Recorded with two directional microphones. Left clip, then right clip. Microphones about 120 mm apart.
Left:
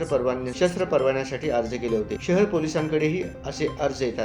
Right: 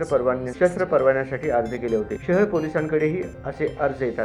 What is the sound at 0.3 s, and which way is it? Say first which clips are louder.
Speech: right 3 dB; 30° left (ahead or behind).